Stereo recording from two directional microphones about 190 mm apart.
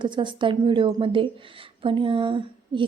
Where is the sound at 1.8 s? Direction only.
25° right (ahead or behind).